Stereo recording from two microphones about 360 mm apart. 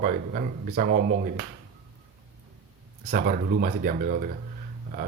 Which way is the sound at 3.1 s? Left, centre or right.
Right.